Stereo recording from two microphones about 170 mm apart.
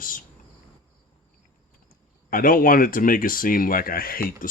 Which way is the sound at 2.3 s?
55° left (ahead or behind).